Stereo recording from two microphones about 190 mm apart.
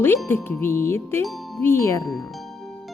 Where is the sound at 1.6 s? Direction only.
15° left (ahead or behind).